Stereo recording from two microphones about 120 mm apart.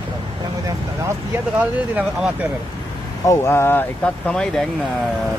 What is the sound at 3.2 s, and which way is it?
Speech, 20° left (ahead or behind).